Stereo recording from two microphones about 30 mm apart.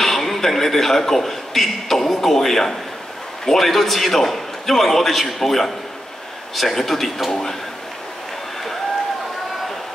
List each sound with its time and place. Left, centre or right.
0.0 s a man's voice: centre
6.7 s a man's voice: centre